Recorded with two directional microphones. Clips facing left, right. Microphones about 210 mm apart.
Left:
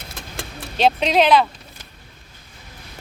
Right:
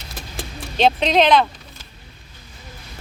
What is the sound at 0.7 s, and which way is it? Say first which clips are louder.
Speech: right 1 dB; 5° left (ahead or behind).